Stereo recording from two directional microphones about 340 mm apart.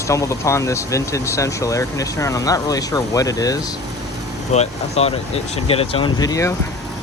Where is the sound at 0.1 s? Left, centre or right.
Centre.